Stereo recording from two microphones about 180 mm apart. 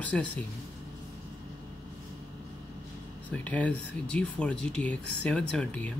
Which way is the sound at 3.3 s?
10° left (ahead or behind).